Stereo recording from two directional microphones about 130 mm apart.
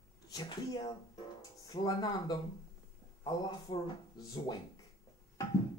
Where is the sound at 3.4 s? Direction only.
30° left (ahead or behind).